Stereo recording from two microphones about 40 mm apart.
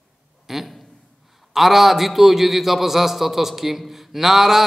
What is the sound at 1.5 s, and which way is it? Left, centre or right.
A man's voice, centre.